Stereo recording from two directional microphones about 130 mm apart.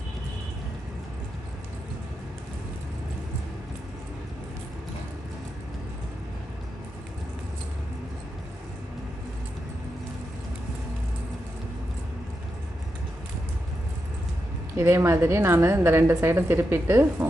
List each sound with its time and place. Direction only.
14.8 s a woman's voice: 20° right (ahead or behind)